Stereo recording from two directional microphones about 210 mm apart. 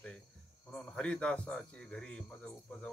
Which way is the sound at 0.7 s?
5° left (ahead or behind).